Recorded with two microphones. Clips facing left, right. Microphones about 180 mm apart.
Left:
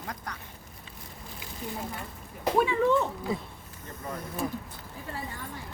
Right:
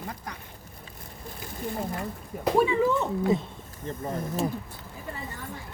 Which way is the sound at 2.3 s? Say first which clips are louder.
Right 2 dB; 50° right (ahead or behind).